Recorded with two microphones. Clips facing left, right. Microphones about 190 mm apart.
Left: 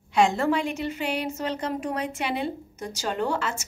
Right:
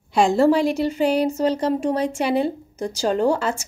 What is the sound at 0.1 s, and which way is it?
A woman's voice, 35° right (ahead or behind).